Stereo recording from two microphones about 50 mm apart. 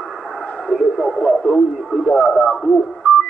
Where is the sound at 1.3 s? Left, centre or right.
Centre.